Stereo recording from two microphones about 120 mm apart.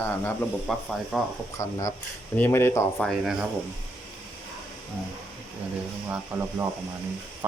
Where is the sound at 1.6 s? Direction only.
25° left (ahead or behind).